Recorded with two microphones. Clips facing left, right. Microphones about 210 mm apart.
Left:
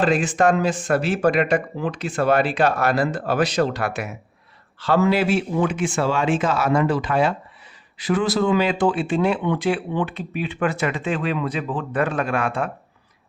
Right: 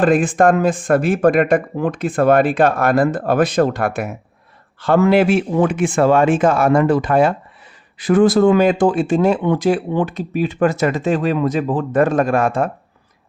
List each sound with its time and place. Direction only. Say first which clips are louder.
0.0 s speech: right 5 dB; 55° right (ahead or behind)